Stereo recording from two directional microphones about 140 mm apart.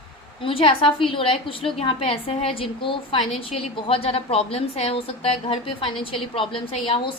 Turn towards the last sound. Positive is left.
turn(degrees=40)  # may be behind; listen again after turning